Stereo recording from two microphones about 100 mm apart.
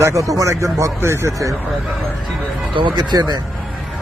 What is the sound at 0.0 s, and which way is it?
Speech, 30° right (ahead or behind).